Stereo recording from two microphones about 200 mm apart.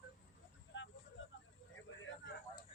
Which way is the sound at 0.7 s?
70° left (ahead or behind).